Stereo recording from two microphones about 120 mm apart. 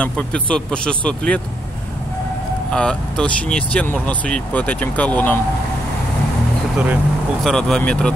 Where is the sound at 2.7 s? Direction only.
5° left (ahead or behind).